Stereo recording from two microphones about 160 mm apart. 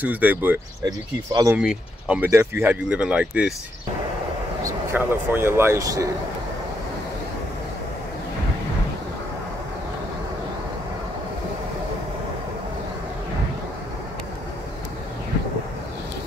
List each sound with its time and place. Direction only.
0.0 s speech: 10° right (ahead or behind)
0.8 s speech: 25° right (ahead or behind)
1.5 s speech: 5° right (ahead or behind)
4.9 s speech: 15° right (ahead or behind)